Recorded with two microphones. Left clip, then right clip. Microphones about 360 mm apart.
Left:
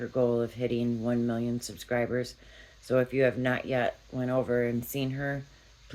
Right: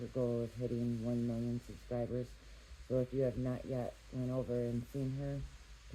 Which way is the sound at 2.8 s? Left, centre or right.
Left.